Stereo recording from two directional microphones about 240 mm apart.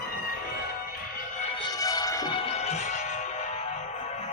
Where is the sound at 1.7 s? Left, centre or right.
Centre.